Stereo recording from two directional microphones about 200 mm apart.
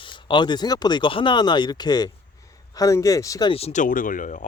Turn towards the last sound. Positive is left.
turn(degrees=40)  # may be behind; listen again after turning